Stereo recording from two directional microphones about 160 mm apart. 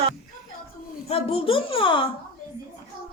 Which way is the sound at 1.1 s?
35° left (ahead or behind).